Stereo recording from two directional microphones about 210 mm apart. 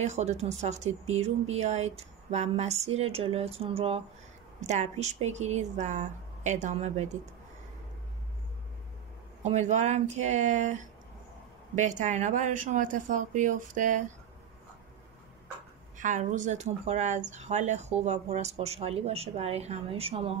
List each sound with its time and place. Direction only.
0.0 s speech: 30° right (ahead or behind)
9.5 s speech: 35° right (ahead or behind)
16.0 s speech: 35° right (ahead or behind)